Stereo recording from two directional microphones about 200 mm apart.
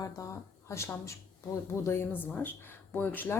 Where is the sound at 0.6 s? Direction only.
15° left (ahead or behind).